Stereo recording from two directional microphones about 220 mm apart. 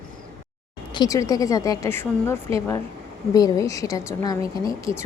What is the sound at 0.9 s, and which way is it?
A woman's voice, 15° left (ahead or behind).